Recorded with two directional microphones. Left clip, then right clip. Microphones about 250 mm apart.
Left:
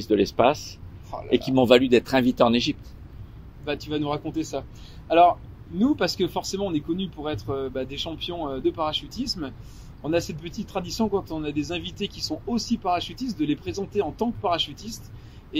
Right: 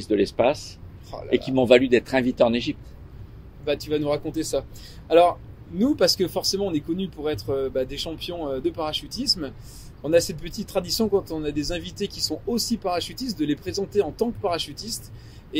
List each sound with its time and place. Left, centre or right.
0.0 s speech: left
3.6 s speech: centre